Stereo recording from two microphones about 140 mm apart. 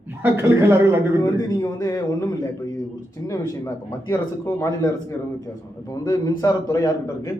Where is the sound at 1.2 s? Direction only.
25° left (ahead or behind).